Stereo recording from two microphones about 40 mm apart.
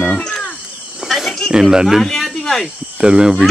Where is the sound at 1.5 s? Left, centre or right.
Centre.